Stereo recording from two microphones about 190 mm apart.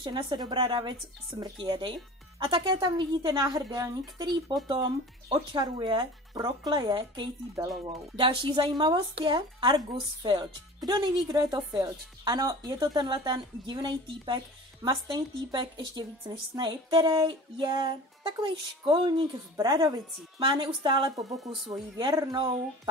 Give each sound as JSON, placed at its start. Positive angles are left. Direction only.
{"t": 0.0, "sound": "speech", "side_deg": -25}